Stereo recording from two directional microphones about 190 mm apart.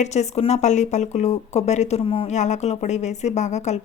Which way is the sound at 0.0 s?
35° left (ahead or behind).